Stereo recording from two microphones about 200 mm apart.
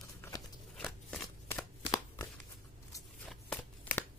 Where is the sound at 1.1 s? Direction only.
5° left (ahead or behind).